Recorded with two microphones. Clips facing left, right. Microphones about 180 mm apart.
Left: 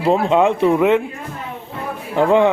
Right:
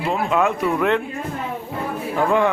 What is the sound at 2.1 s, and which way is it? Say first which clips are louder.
Speech: left 5 dB; 20° left (ahead or behind).